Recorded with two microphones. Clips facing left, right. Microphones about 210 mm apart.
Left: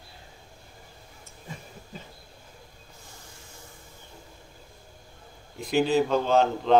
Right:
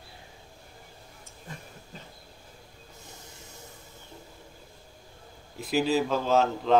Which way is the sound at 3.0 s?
20° right (ahead or behind).